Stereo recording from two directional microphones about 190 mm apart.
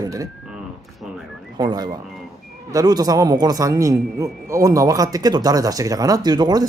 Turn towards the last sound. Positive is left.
turn(degrees=-20)  # may be behind; listen again after turning